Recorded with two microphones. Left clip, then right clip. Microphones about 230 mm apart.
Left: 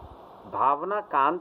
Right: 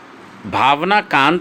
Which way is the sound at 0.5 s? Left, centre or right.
Right.